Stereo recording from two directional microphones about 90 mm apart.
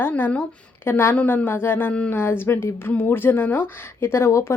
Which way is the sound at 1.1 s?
15° left (ahead or behind).